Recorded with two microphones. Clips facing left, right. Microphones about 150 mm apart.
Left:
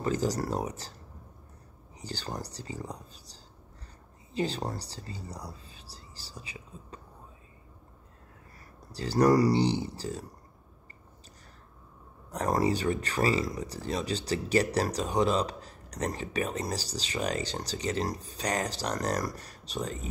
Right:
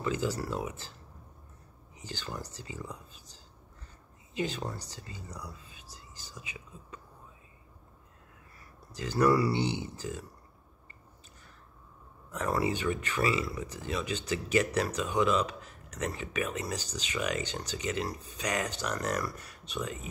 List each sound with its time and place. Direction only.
0.0 s speech: 40° left (ahead or behind)
2.0 s speech: 35° left (ahead or behind)
8.9 s speech: 35° left (ahead or behind)
12.3 s speech: 40° left (ahead or behind)